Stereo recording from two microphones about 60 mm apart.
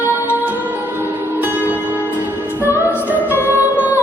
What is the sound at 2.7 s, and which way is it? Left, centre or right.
Music, right.